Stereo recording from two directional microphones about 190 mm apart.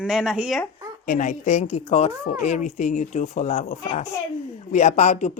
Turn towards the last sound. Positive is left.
turn(degrees=35)  # may be behind; listen again after turning